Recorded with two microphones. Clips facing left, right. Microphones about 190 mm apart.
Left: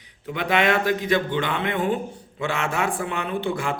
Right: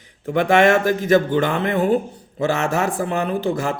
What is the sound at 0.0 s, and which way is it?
A man's voice, 45° right (ahead or behind).